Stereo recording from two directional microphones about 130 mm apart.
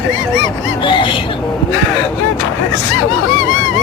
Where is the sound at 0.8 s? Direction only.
40° left (ahead or behind).